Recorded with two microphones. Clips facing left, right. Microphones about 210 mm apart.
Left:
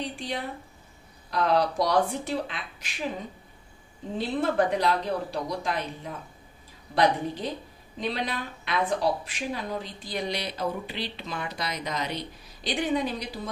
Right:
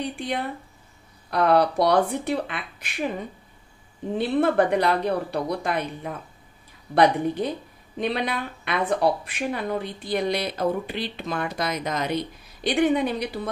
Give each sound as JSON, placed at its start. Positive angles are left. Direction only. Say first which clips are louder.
{"t": 0.1, "sound": "speech", "louder": "right 4 dB", "side_deg": -60}
{"t": 4.2, "sound": "speech", "louder": "right 4 dB", "side_deg": -60}
{"t": 7.4, "sound": "speech", "louder": "right 5 dB", "side_deg": -60}